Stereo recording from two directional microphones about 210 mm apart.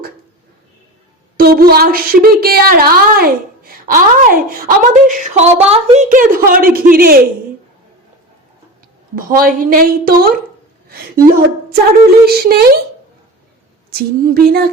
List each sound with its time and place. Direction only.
1.4 s a woman's voice: 45° right (ahead or behind)
9.1 s a woman's voice: 45° right (ahead or behind)
13.9 s a woman's voice: 45° right (ahead or behind)